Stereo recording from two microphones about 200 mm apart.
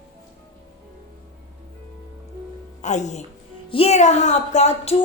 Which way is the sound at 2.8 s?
35° left (ahead or behind).